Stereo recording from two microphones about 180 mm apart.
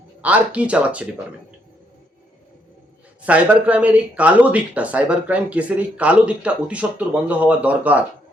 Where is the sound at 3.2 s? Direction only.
10° right (ahead or behind).